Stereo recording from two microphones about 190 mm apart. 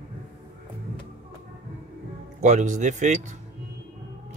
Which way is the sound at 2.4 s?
40° right (ahead or behind).